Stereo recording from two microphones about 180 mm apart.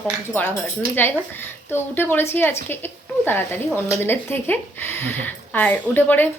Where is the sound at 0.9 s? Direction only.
10° left (ahead or behind).